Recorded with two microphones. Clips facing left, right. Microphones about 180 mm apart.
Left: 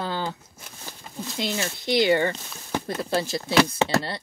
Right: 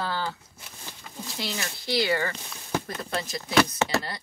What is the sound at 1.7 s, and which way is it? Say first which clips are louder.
Speech: left 5 dB; 20° left (ahead or behind).